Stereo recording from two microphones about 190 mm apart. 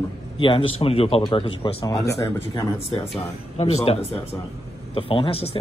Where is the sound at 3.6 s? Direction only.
35° left (ahead or behind).